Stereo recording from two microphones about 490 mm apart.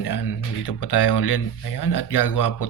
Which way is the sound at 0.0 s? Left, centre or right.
Left.